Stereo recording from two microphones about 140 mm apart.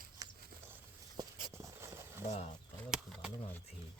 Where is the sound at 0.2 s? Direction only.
25° right (ahead or behind).